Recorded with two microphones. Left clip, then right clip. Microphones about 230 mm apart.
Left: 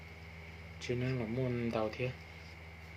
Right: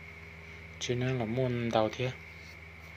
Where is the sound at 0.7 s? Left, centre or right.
Right.